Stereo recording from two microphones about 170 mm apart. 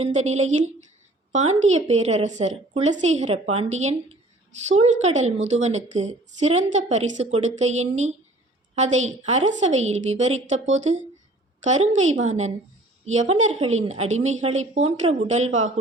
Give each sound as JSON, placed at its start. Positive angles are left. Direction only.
{"t": 0.0, "sound": "a woman's voice", "side_deg": -40}